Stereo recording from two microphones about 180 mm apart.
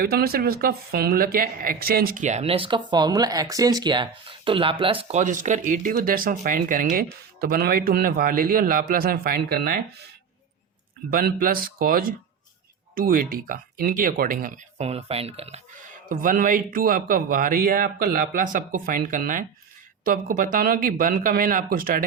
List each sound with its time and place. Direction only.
0.0 s a man's voice: 55° right (ahead or behind)
11.1 s speech: 55° right (ahead or behind); by 15.6 s 35° right (ahead or behind)
16.0 s speech: 50° right (ahead or behind)